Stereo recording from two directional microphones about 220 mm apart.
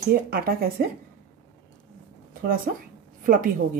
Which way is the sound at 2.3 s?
40° right (ahead or behind).